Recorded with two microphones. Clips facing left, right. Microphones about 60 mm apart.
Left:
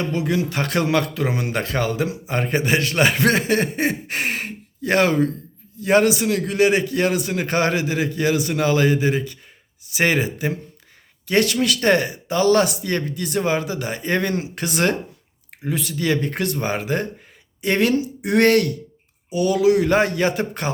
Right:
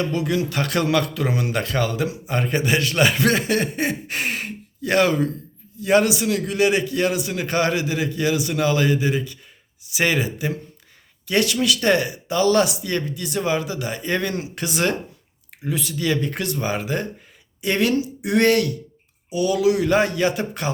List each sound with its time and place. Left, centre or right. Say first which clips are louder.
0.0 s speech: even; left